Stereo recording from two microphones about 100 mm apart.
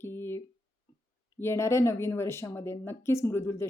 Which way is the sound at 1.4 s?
25° left (ahead or behind).